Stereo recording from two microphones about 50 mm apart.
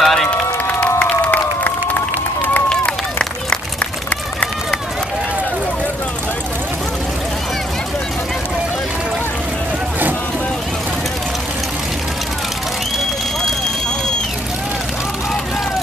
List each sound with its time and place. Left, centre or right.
0.0 s run: centre
0.7 s crowd: left
1.2 s a sound: left
2.7 s run: centre